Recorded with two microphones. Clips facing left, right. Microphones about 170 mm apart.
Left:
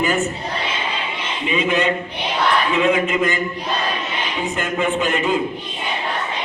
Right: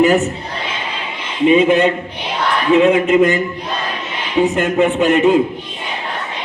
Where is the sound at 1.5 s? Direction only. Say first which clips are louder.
Right 4 dB; 55° right (ahead or behind).